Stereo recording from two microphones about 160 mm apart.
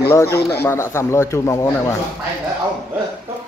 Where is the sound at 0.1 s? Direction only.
20° left (ahead or behind).